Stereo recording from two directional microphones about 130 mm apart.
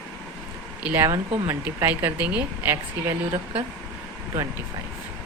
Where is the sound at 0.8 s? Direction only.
20° right (ahead or behind).